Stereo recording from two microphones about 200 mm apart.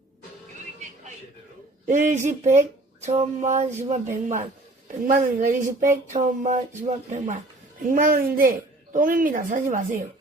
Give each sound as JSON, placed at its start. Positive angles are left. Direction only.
{"t": 1.9, "sound": "a woman's voice", "side_deg": -40}